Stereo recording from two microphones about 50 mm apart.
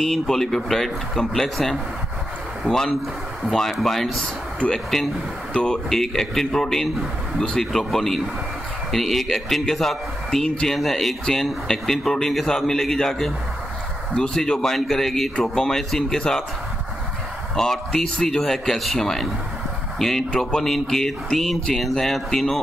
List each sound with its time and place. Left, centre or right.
0.0 s a man's voice: centre
4.6 s speech: centre
5.9 s a man's voice: centre
14.1 s speech: centre
17.6 s a man's voice: centre